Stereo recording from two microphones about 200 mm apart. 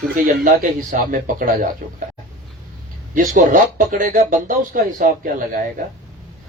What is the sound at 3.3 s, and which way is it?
Speech, 40° right (ahead or behind).